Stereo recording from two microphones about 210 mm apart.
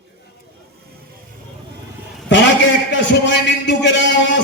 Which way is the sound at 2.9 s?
55° left (ahead or behind).